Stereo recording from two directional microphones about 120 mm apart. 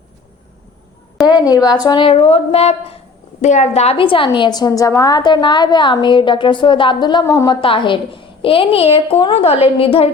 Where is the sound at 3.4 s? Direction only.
75° left (ahead or behind); by 7.2 s 40° left (ahead or behind).